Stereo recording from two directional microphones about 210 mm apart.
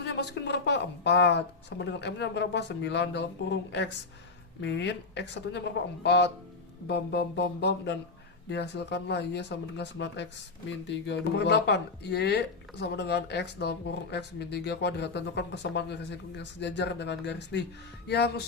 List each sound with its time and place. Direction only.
0.0 s speech: 55° left (ahead or behind)